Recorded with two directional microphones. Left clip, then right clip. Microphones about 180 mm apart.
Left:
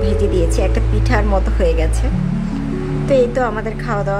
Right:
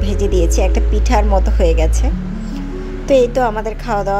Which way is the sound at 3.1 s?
20° right (ahead or behind).